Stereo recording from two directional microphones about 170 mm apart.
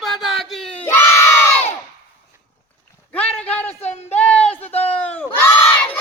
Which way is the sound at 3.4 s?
10° left (ahead or behind).